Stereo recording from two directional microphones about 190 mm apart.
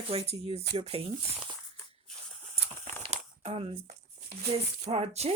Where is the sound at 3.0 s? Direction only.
30° right (ahead or behind).